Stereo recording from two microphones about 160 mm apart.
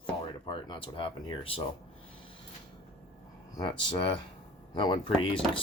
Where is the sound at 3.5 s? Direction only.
25° left (ahead or behind).